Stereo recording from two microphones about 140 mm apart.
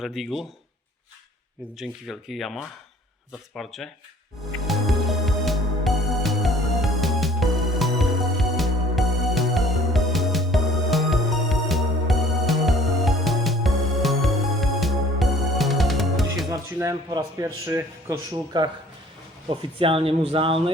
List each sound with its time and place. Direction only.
0.0 s speech: centre (ahead or behind)
1.8 s speech: centre (ahead or behind)
4.6 s music: centre (ahead or behind)
16.7 s speech: 25° right (ahead or behind)
18.5 s speech: 35° right (ahead or behind)